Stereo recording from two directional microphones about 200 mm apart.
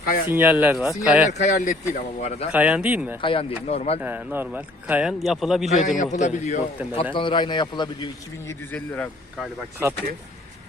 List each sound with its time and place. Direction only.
0.0 s speech: 45° left (ahead or behind)
0.3 s a man's voice: 10° right (ahead or behind)
1.3 s a man's voice: 35° left (ahead or behind)
2.5 s speech: 5° right (ahead or behind)
3.2 s a man's voice: 25° left (ahead or behind)
4.0 s a man's voice: 10° right (ahead or behind)
6.0 s a man's voice: 35° left (ahead or behind)
6.9 s a man's voice: 25° left (ahead or behind)
8.7 s a man's voice: 5° left (ahead or behind)